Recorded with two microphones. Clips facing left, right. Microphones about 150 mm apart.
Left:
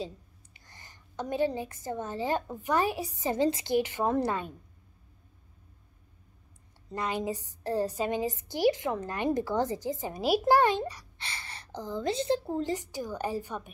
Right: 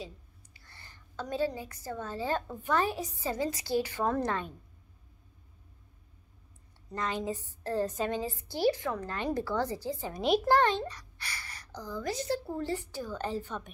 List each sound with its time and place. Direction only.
0.0 s a sound: 20° left (ahead or behind)
1.5 s a woman's voice: 20° left (ahead or behind)
7.0 s a woman's voice: 10° left (ahead or behind)
11.1 s a woman's voice: 25° left (ahead or behind)